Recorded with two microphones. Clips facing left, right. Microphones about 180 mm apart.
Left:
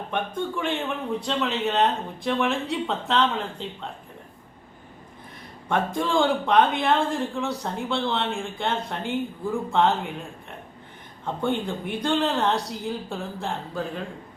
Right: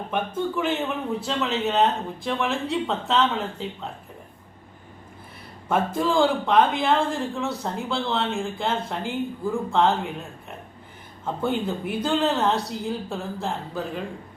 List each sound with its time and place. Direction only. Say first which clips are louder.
0.1 s speech: right 2 dB; 5° right (ahead or behind)
5.6 s speech: right 2 dB; 5° right (ahead or behind)
11.4 s speech: right 1 dB; 5° right (ahead or behind)